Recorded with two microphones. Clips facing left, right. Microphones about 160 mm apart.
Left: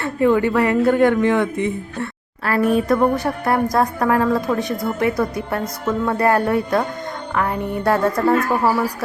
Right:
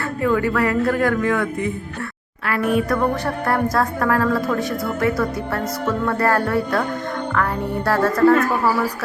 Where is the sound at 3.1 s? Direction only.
15° left (ahead or behind).